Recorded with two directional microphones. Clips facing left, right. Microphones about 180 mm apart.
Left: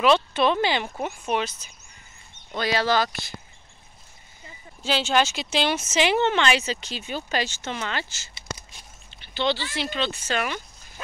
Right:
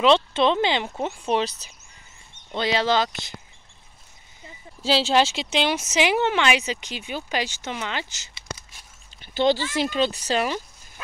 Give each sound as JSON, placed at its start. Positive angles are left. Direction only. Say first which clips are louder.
{"t": 0.0, "sound": "speech", "louder": "right 1 dB", "side_deg": -25}
{"t": 2.5, "sound": "speech", "louder": "right 1 dB", "side_deg": -20}
{"t": 4.8, "sound": "speech", "louder": "right 3 dB", "side_deg": -35}
{"t": 9.2, "sound": "a sound", "louder": "right 5 dB", "side_deg": -45}
{"t": 9.8, "sound": "speech", "louder": "right 5 dB", "side_deg": -40}